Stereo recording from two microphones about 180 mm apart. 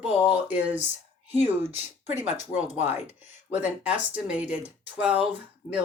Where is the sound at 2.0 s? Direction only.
40° left (ahead or behind).